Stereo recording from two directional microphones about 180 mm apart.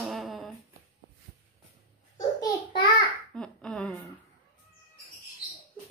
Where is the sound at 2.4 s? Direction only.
20° left (ahead or behind).